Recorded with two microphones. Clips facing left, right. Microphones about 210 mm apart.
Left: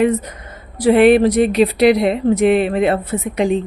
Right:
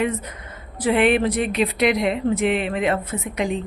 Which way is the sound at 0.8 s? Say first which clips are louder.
Left 8 dB; 35° left (ahead or behind).